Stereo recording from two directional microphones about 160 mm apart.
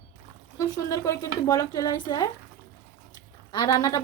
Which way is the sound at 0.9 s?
20° left (ahead or behind).